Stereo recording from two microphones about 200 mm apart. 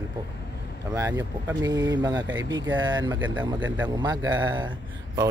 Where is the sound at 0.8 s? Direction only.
15° right (ahead or behind).